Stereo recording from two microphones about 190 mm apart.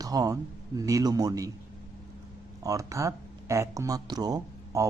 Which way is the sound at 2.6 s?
15° right (ahead or behind).